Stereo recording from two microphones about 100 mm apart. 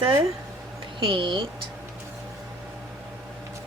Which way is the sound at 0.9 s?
55° right (ahead or behind).